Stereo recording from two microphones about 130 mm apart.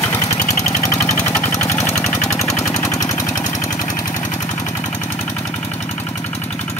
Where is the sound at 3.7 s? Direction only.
75° left (ahead or behind).